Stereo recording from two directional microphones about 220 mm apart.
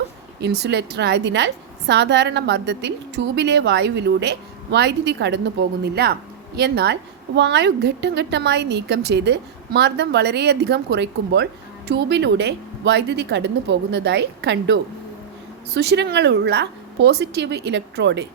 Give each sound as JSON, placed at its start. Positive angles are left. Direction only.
{"t": 0.4, "sound": "a woman's voice", "side_deg": -50}